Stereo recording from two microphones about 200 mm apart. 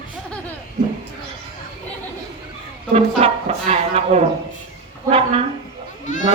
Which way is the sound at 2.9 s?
30° right (ahead or behind).